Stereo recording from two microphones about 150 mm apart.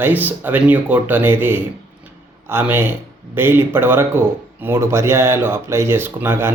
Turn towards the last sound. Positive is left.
turn(degrees=-15)  # may be behind; listen again after turning